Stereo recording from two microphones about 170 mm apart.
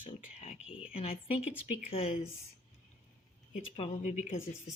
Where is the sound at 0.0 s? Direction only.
40° left (ahead or behind).